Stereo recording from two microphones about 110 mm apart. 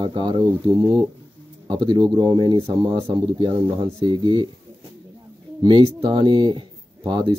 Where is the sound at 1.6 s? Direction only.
45° right (ahead or behind).